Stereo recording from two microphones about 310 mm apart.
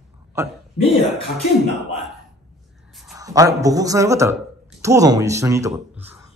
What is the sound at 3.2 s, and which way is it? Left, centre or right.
A woman's voice, centre.